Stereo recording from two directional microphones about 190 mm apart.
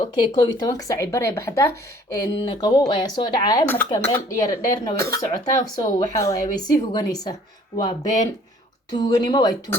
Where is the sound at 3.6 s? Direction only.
10° left (ahead or behind).